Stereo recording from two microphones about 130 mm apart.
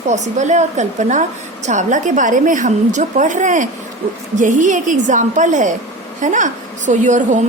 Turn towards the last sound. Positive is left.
turn(degrees=-70)  # may be behind; listen again after turning